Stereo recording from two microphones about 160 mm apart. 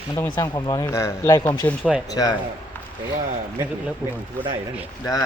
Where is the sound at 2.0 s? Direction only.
25° left (ahead or behind).